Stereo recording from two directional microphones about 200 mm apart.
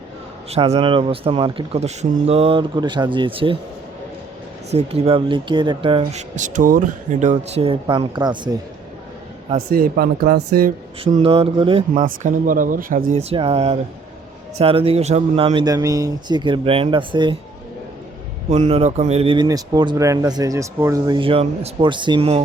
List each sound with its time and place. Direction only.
0.5 s speech: 30° right (ahead or behind)
4.7 s speech: 30° right (ahead or behind)
9.7 s speech: 50° right (ahead or behind)
11.0 s speech: 30° right (ahead or behind)
12.0 s speech: 45° right (ahead or behind)
13.1 s speech: 30° right (ahead or behind)
18.5 s speech: 35° right (ahead or behind)